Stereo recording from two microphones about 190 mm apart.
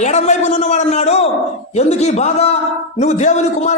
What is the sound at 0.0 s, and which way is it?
A man's voice, 35° left (ahead or behind).